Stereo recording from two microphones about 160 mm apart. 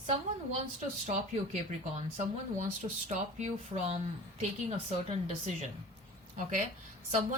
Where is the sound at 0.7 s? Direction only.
45° right (ahead or behind).